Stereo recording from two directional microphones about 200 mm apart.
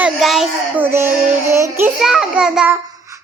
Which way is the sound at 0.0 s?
Centre (ahead or behind).